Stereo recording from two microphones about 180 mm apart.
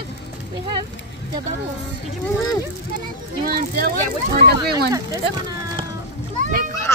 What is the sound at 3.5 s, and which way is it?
Speech, 55° right (ahead or behind).